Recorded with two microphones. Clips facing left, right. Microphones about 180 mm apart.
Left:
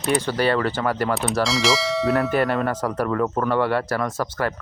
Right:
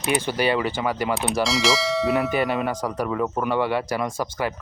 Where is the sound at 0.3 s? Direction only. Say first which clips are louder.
Left 1 dB; 5° right (ahead or behind).